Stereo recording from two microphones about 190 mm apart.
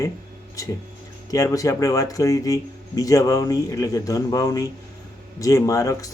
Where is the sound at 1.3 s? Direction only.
15° left (ahead or behind).